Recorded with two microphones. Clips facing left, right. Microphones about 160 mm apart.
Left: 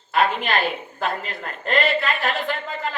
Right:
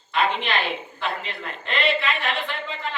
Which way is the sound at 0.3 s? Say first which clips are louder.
Left 2 dB; 45° left (ahead or behind).